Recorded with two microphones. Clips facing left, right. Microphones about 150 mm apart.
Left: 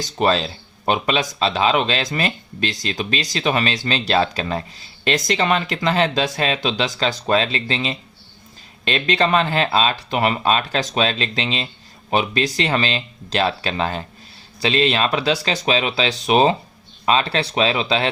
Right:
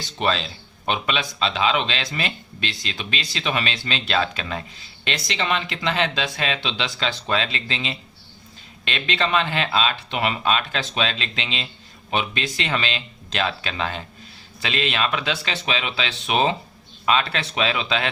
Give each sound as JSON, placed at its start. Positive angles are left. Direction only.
{"t": 0.0, "sound": "speech", "side_deg": 40}